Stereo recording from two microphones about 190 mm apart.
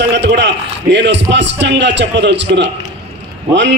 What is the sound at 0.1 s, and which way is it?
A man's voice, 65° right (ahead or behind).